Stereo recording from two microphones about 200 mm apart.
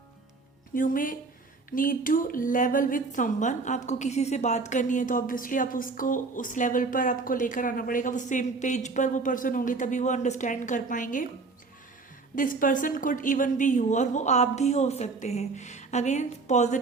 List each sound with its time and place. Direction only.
0.7 s a woman's voice: 45° left (ahead or behind)
12.4 s a woman's voice: 45° left (ahead or behind)